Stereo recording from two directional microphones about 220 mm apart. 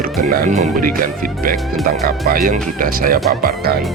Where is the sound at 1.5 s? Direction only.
Centre (ahead or behind).